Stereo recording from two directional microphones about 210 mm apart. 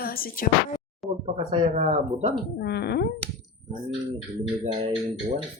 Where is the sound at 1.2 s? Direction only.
30° right (ahead or behind).